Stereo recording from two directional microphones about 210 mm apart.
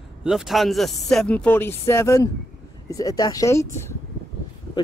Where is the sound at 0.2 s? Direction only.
Centre (ahead or behind).